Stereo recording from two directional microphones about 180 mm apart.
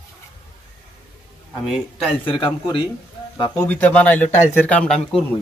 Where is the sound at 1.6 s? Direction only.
5° right (ahead or behind).